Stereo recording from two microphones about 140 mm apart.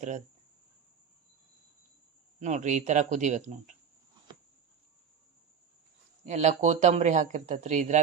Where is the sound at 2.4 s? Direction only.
60° right (ahead or behind).